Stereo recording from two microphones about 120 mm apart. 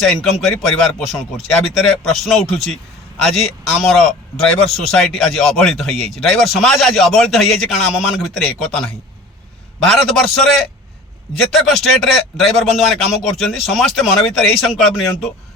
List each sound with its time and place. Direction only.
0.0 s a man's voice: centre (ahead or behind)
9.9 s a man's voice: centre (ahead or behind)
11.5 s a man's voice: centre (ahead or behind)